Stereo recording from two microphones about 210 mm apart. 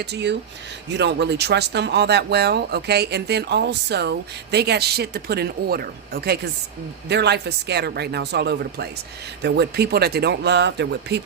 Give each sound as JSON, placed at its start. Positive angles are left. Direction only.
{"t": 0.0, "sound": "speech", "side_deg": -55}